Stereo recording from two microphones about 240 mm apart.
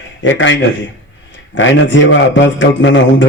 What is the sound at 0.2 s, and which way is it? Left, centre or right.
A man's voice, left.